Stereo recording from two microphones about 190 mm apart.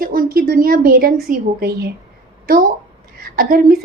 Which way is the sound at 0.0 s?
50° right (ahead or behind).